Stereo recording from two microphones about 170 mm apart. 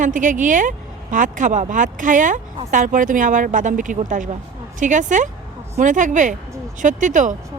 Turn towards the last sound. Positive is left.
turn(degrees=-50)  # may be behind; listen again after turning